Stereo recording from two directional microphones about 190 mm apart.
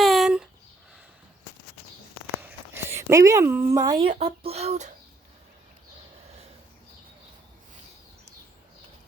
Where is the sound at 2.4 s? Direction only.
10° right (ahead or behind); by 4.9 s 35° right (ahead or behind).